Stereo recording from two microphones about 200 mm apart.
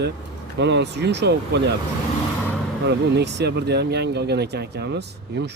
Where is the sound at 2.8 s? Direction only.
60° right (ahead or behind).